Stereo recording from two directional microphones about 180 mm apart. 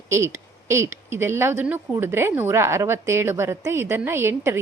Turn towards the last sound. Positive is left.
turn(degrees=-15)  # may be behind; listen again after turning